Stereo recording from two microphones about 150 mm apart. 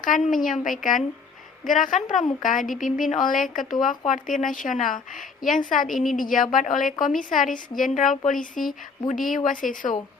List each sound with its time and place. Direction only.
0.0 s a woman's voice: 65° left (ahead or behind)